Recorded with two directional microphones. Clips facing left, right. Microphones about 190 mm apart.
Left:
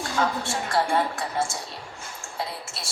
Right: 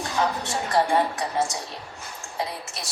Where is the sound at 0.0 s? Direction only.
20° right (ahead or behind).